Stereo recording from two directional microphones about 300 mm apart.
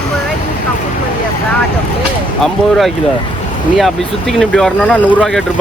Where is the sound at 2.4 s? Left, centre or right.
Centre.